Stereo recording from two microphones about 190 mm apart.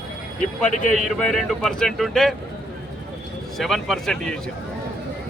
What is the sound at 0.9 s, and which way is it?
Speech, centre (ahead or behind).